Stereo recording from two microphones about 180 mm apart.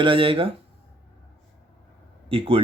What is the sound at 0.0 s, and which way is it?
Speech, 30° right (ahead or behind).